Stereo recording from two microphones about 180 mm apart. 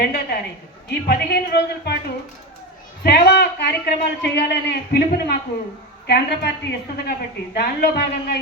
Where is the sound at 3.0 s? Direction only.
65° left (ahead or behind).